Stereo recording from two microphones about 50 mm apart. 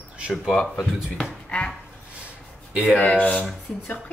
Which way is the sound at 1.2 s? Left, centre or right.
Left.